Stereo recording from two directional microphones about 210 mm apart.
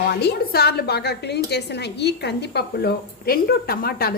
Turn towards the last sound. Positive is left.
turn(degrees=45)  # may be behind; listen again after turning